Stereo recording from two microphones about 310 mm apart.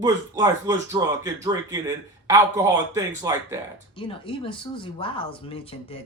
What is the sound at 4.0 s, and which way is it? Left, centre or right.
Speech, centre.